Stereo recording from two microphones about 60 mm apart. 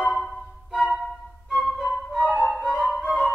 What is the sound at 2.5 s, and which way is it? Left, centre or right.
Music, centre.